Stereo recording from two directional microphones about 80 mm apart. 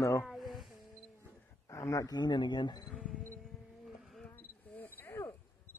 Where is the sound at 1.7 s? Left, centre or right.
Left.